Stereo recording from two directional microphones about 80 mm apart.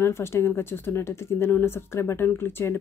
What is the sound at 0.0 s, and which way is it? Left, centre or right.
Speech, left.